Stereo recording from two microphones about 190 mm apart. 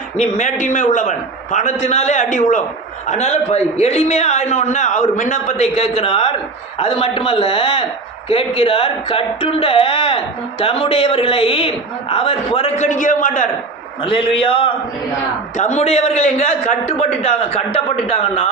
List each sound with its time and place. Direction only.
0.2 s a man's voice: 40° left (ahead or behind)
14.0 s a man's voice: 30° left (ahead or behind)